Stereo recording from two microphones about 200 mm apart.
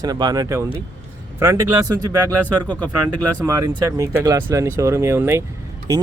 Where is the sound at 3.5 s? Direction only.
15° right (ahead or behind).